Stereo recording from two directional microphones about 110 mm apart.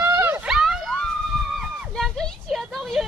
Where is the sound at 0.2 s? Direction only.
10° right (ahead or behind).